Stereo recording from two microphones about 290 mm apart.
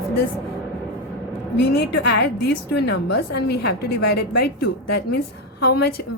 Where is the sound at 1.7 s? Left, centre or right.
Left.